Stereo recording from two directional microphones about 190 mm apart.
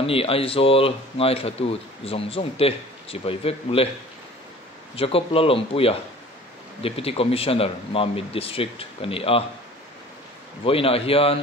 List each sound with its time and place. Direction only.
0.0 s speech: 30° left (ahead or behind)
4.9 s speech: 30° left (ahead or behind)
10.6 s speech: 30° left (ahead or behind)